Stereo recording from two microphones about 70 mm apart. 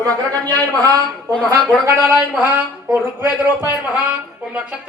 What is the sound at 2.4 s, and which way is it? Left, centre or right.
Speech, right.